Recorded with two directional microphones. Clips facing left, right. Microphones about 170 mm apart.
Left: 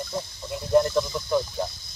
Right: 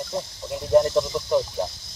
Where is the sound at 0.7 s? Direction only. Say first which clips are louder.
Right 2 dB; 20° right (ahead or behind).